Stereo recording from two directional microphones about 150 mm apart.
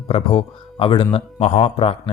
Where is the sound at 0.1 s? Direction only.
35° left (ahead or behind).